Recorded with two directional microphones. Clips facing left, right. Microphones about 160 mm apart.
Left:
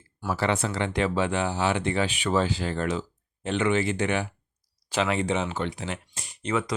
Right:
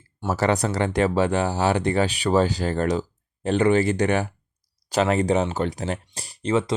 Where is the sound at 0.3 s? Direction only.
40° right (ahead or behind).